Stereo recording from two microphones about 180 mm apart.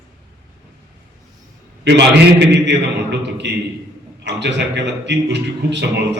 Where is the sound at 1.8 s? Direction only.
70° right (ahead or behind).